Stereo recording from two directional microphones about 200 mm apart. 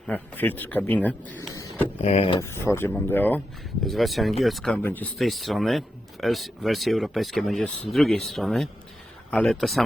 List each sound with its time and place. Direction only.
0.1 s speech: 10° left (ahead or behind)
2.0 s speech: 30° left (ahead or behind)
2.4 s speech: 15° left (ahead or behind)